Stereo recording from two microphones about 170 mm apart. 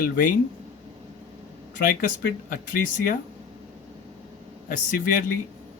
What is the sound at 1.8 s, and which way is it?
Speech, 55° left (ahead or behind).